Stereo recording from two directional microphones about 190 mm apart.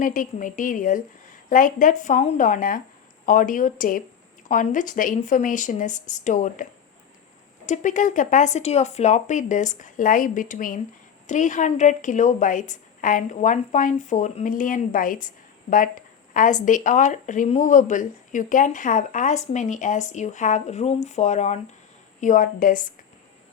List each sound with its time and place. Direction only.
0.0 s speech: 45° left (ahead or behind)